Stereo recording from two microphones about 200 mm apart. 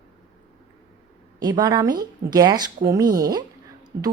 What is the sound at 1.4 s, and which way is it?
Speech, 20° right (ahead or behind).